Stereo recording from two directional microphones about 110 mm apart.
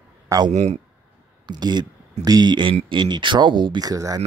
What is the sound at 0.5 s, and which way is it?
Speech, 90° right.